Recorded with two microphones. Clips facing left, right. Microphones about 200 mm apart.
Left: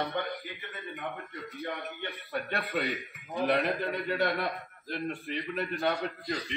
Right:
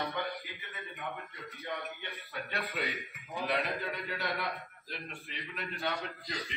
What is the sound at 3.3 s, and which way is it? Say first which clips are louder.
A man's voice: left 6 dB; 50° left (ahead or behind).